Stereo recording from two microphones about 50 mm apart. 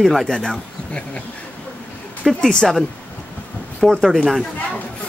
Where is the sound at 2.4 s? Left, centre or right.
Centre.